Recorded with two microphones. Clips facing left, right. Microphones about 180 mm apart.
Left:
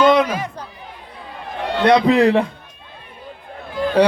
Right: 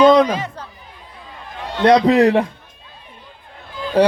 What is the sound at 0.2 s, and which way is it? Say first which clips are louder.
Speech: right 3 dB; 10° left (ahead or behind).